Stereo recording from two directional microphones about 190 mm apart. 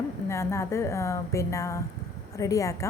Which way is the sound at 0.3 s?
15° left (ahead or behind).